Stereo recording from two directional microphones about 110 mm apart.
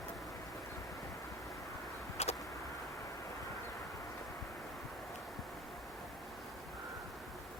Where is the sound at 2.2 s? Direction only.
75° left (ahead or behind).